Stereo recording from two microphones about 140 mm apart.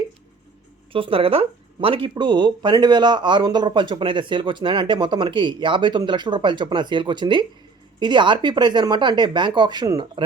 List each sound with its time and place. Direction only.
0.9 s speech: 40° right (ahead or behind)